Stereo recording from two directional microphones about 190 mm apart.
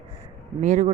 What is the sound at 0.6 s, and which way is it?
Speech, 40° right (ahead or behind).